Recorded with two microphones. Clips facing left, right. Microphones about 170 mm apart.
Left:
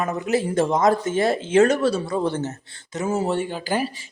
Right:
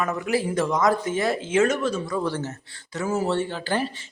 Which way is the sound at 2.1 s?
25° left (ahead or behind).